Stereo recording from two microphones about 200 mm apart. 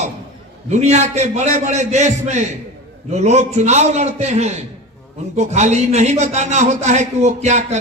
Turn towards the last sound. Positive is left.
turn(degrees=-35)  # may be behind; listen again after turning